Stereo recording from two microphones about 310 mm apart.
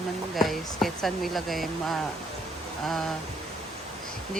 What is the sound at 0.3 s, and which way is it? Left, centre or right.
A woman's voice, centre.